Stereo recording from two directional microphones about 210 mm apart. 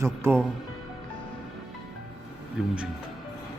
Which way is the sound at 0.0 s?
10° right (ahead or behind).